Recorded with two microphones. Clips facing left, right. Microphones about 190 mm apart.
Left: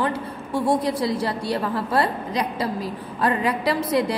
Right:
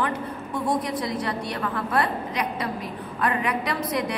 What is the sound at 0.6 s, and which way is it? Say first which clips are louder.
A woman's voice: left 4 dB; 30° left (ahead or behind).